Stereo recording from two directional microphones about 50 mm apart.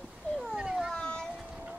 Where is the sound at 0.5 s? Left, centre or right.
Centre.